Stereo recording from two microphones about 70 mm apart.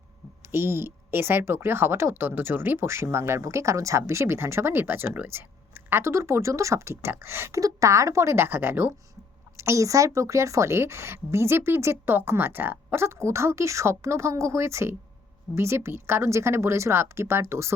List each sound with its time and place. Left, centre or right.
0.5 s a woman's voice: right
7.6 s a woman's voice: right
9.6 s a woman's voice: right